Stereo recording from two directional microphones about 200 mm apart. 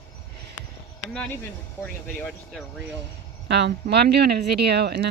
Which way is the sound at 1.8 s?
5° left (ahead or behind).